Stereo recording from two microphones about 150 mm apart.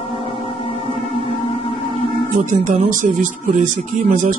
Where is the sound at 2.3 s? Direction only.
55° right (ahead or behind).